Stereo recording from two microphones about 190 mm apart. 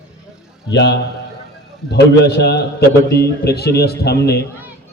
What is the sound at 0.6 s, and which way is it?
Speech, 65° left (ahead or behind).